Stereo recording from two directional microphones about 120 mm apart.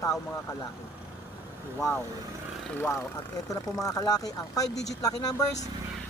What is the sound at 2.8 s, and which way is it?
Speech, 20° left (ahead or behind).